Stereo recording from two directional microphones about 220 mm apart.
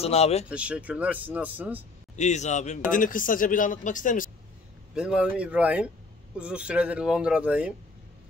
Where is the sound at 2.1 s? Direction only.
30° left (ahead or behind).